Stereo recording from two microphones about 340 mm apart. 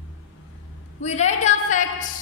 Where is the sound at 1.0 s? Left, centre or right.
Centre.